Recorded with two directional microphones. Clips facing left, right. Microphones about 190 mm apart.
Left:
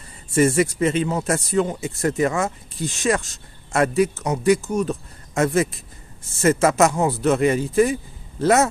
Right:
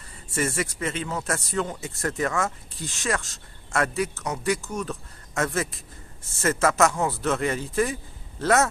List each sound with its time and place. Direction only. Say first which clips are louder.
0.3 s speech: left 10 dB; 15° left (ahead or behind)